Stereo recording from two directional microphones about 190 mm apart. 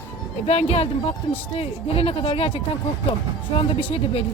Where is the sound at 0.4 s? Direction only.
35° left (ahead or behind).